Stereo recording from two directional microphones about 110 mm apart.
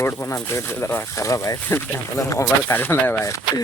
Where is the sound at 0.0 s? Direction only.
20° left (ahead or behind).